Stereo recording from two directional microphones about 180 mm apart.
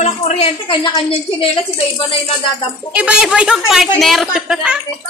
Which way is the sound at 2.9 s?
5° right (ahead or behind).